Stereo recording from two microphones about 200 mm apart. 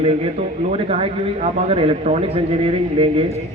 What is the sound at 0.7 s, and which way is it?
A man's voice, 30° right (ahead or behind).